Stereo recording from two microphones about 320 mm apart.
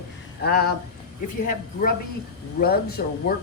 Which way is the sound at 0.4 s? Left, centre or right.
Left.